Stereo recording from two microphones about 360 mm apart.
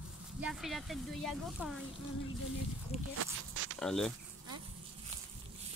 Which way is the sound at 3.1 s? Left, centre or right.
Right.